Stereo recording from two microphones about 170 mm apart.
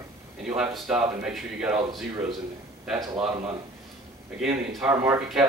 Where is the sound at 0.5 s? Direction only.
5° right (ahead or behind).